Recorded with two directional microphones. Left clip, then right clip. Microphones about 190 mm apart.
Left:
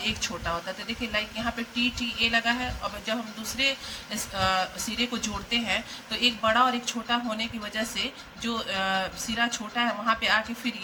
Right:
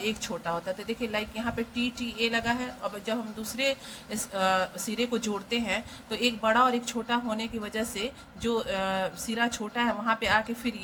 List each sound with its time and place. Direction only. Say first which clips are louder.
0.0 s speech: left 2 dB; 50° right (ahead or behind)